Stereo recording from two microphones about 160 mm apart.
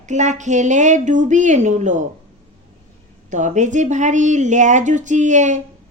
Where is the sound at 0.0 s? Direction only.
50° right (ahead or behind).